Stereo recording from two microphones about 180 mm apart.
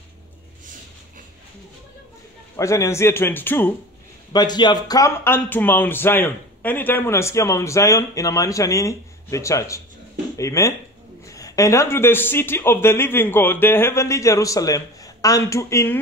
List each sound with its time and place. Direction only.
2.5 s speech: 15° left (ahead or behind)
4.3 s speech: 25° left (ahead or behind)